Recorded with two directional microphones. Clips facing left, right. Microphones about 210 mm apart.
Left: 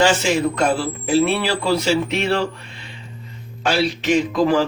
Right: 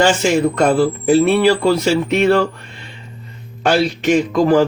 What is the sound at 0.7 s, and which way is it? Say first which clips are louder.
A man's voice: right 6 dB; 50° right (ahead or behind).